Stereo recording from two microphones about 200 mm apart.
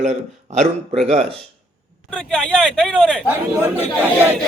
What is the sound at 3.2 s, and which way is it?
Speech, 10° right (ahead or behind).